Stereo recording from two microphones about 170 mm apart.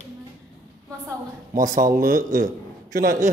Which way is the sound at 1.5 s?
50° right (ahead or behind).